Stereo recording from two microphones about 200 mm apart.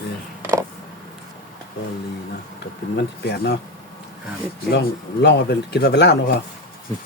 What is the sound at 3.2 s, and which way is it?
Speech, 55° left (ahead or behind).